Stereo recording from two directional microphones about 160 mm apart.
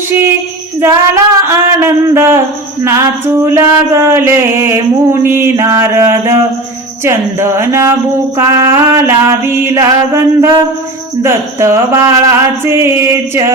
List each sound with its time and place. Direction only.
0.8 s mantra: 15° right (ahead or behind)